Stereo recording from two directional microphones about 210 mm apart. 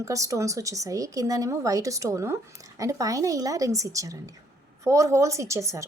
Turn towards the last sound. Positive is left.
turn(degrees=-15)  # may be behind; listen again after turning